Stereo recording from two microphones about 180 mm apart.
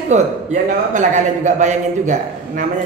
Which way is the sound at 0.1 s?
40° right (ahead or behind).